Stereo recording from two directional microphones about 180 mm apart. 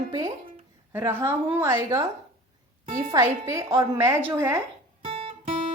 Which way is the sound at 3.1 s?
15° right (ahead or behind).